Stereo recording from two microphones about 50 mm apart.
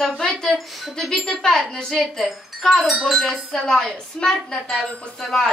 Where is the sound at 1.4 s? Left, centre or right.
Centre.